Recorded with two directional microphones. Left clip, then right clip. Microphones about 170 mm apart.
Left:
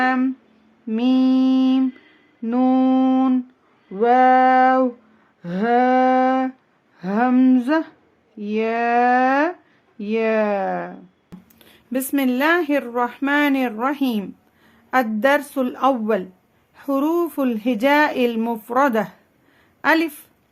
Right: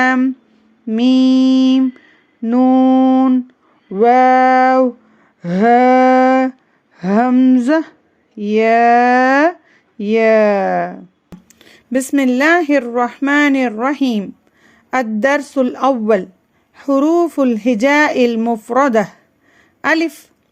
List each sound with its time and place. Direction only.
0.9 s mantra: 35° right (ahead or behind)
2.4 s humming: 30° right (ahead or behind)
3.9 s speech: 40° right (ahead or behind)
5.4 s a sound: 35° right (ahead or behind)
8.4 s speech: 35° right (ahead or behind)